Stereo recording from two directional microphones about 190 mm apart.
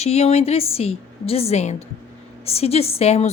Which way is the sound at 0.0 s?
35° left (ahead or behind).